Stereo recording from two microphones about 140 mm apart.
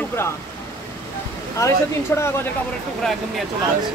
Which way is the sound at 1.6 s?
25° left (ahead or behind).